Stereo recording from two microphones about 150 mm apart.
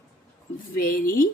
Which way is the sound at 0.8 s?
70° left (ahead or behind).